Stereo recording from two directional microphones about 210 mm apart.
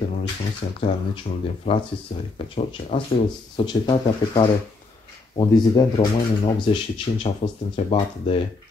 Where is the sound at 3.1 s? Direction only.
25° left (ahead or behind).